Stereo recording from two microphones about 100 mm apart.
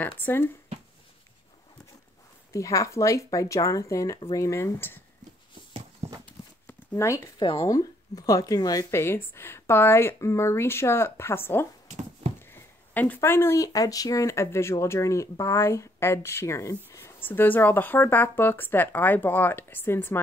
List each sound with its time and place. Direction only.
0.2 s speech: 25° left (ahead or behind)
2.5 s speech: 35° left (ahead or behind)
5.7 s horse: 75° right (ahead or behind)
7.0 s speech: 30° left (ahead or behind)
8.9 s speech: 25° left (ahead or behind)
12.4 s a sound: 20° left (ahead or behind)
13.6 s speech: 35° left (ahead or behind)
17.2 s speech: 20° left (ahead or behind)